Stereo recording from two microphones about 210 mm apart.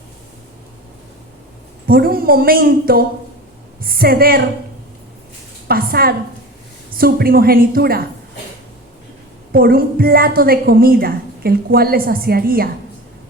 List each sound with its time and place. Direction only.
1.9 s a woman's voice: 45° right (ahead or behind)
5.6 s a woman's voice: 45° right (ahead or behind)
9.5 s a woman's voice: 45° right (ahead or behind)